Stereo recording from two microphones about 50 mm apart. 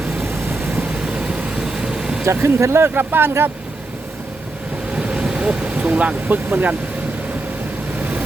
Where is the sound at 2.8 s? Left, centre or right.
Right.